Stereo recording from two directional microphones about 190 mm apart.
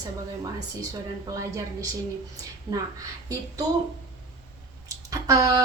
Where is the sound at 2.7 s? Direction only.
20° right (ahead or behind).